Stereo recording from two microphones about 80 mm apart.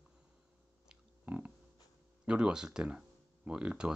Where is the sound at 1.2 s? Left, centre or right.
Right.